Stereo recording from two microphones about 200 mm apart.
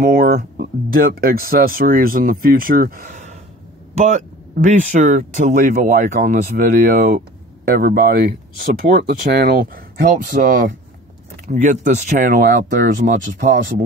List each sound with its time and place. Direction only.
0.0 s speech: 45° right (ahead or behind)